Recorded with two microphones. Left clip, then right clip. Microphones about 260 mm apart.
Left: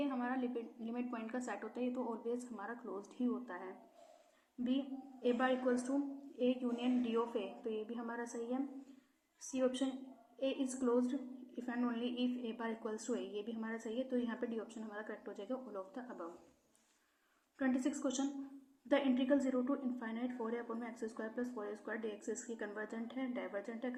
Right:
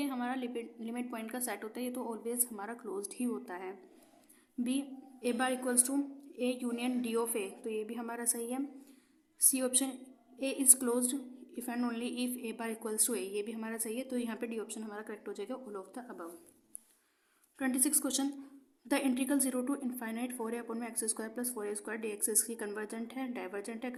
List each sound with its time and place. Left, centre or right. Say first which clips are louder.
0.0 s a woman's voice: right 2 dB; right
5.2 s a woman's voice: right 1 dB; right
17.6 s a woman's voice: right 3 dB; right